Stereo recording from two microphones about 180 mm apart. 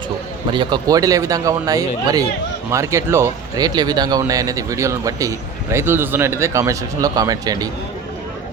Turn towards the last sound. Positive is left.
turn(degrees=-20)  # may be behind; listen again after turning